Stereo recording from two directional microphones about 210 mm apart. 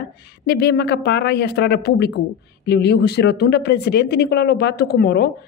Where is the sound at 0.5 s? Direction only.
50° left (ahead or behind).